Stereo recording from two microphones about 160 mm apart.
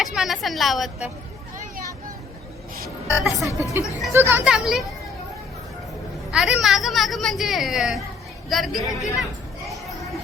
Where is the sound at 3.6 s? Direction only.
20° right (ahead or behind).